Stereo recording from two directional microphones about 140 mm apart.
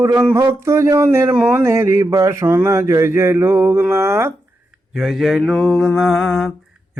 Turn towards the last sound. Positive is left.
turn(degrees=0)  # may be behind; listen again after turning